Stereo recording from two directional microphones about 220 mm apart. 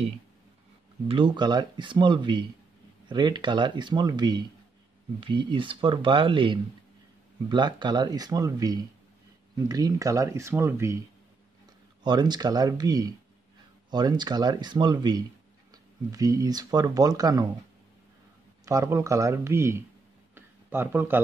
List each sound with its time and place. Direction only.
1.0 s speech: 20° right (ahead or behind)
12.0 s speech: 20° right (ahead or behind)
18.7 s speech: 15° right (ahead or behind)
20.3 s a sound: 10° right (ahead or behind)